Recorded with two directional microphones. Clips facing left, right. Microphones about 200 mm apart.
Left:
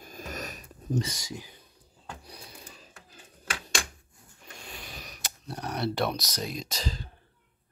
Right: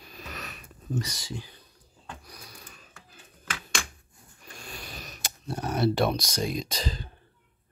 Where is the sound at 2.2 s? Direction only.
30° left (ahead or behind).